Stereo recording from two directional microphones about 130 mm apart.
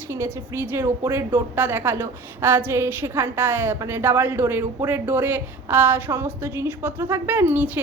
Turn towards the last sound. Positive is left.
turn(degrees=-15)  # may be behind; listen again after turning